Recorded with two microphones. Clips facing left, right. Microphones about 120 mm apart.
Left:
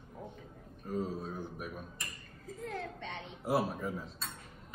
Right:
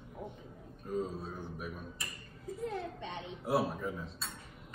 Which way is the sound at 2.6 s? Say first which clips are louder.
Right 2 dB; 20° right (ahead or behind).